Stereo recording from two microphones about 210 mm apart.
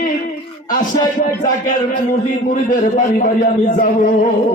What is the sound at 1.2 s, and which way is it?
A man's voice, 35° left (ahead or behind).